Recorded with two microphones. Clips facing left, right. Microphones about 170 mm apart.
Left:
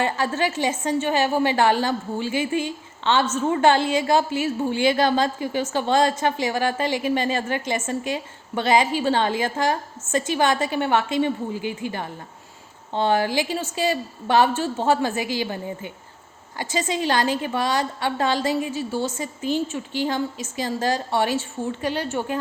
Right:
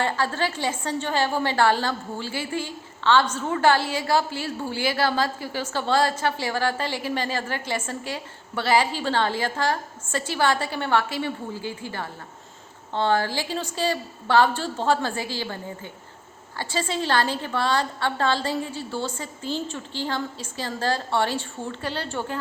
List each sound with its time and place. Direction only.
0.0 s a woman's voice: 15° left (ahead or behind)